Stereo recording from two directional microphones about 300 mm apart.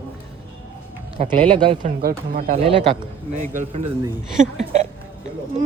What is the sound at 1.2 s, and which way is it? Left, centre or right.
Speech, right.